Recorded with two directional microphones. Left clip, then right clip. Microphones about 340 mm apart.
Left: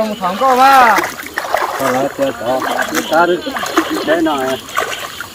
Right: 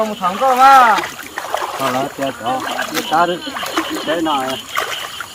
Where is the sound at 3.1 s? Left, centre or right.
Right.